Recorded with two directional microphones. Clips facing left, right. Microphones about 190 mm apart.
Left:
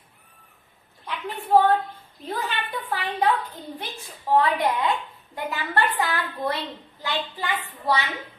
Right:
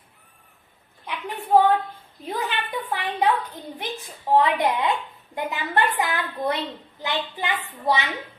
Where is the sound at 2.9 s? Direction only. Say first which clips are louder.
Right 1 dB; 15° right (ahead or behind).